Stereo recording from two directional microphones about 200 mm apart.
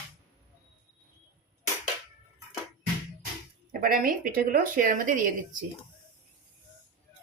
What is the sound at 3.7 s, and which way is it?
A woman's voice, 45° right (ahead or behind).